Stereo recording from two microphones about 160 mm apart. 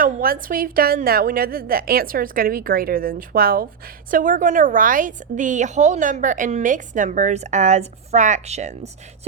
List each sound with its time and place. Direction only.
0.0 s a woman's voice: 60° right (ahead or behind); by 8.9 s 45° right (ahead or behind)